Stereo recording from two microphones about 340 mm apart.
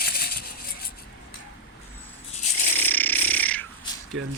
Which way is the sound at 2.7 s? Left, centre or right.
Centre.